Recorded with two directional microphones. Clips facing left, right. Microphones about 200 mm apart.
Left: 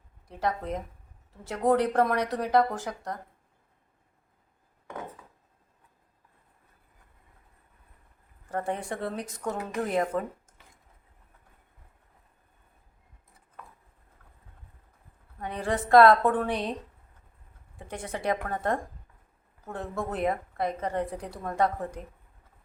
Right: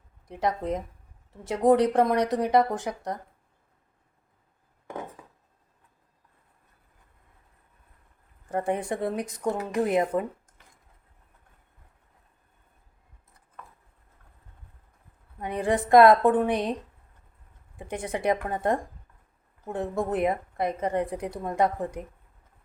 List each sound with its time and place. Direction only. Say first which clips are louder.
0.3 s speech: right 3 dB; 20° right (ahead or behind)
8.4 s a woman's voice: right 4 dB; 15° right (ahead or behind)
15.4 s a woman's voice: right 4 dB; 20° right (ahead or behind)
17.7 s a woman's voice: right 4 dB; 20° right (ahead or behind)